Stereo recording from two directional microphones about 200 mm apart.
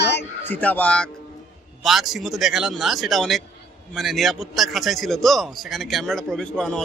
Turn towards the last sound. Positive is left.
turn(degrees=5)  # may be behind; listen again after turning